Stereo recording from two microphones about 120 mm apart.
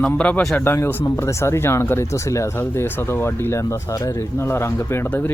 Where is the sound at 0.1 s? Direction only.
10° left (ahead or behind).